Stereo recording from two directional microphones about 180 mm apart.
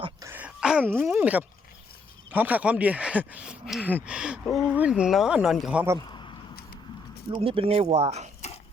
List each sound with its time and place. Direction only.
0.2 s wail: 10° right (ahead or behind)
2.3 s speech: 10° right (ahead or behind)
6.1 s a sound: 25° left (ahead or behind)
7.3 s speech: 30° right (ahead or behind)